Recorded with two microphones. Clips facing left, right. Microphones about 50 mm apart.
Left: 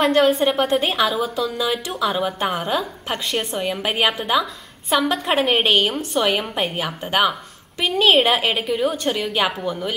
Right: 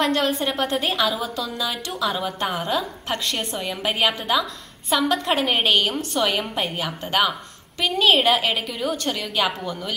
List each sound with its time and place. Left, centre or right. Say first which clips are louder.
0.0 s a woman's voice: left 5 dB; centre